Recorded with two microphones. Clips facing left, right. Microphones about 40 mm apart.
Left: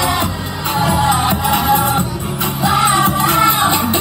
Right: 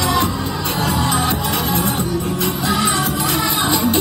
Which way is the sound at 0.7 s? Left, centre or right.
Centre.